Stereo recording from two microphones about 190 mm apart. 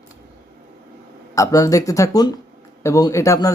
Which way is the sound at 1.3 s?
15° left (ahead or behind).